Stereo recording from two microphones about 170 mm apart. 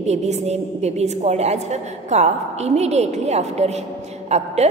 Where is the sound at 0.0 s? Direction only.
40° right (ahead or behind).